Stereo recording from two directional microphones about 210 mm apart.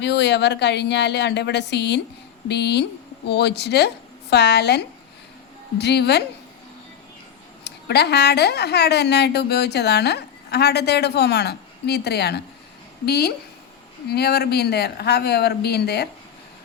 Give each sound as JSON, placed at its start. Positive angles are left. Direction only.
{"t": 0.0, "sound": "a woman's voice", "side_deg": 55}
{"t": 7.6, "sound": "speech", "side_deg": 50}